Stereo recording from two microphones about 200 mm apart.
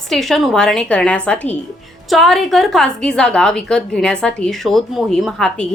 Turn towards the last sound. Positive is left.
turn(degrees=5)  # may be behind; listen again after turning